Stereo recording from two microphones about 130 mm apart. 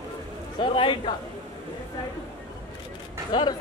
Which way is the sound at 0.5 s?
40° left (ahead or behind).